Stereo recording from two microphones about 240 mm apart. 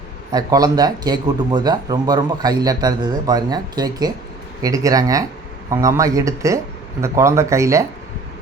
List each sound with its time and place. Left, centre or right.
0.3 s speech: centre